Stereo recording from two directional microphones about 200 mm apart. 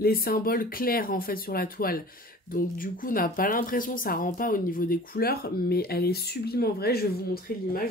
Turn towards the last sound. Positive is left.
turn(degrees=50)  # may be behind; listen again after turning